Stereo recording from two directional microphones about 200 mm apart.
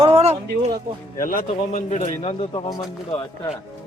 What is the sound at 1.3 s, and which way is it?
A man's voice, 40° left (ahead or behind).